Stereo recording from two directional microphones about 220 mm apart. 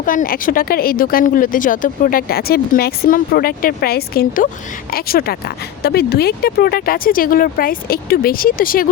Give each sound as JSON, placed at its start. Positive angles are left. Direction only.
{"t": 0.0, "sound": "speech", "side_deg": 40}